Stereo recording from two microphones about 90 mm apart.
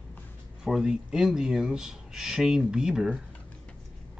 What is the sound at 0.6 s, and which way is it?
Speech, 5° right (ahead or behind).